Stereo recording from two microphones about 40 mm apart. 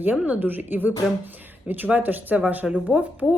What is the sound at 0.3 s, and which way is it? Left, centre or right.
Speech, right.